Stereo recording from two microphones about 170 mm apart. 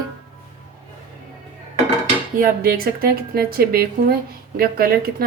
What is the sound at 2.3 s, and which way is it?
A woman's voice, 60° right (ahead or behind).